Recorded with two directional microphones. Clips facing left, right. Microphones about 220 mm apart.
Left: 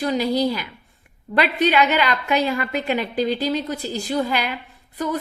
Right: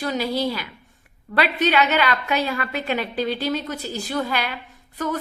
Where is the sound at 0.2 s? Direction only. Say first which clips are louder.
Left 3 dB; 15° left (ahead or behind).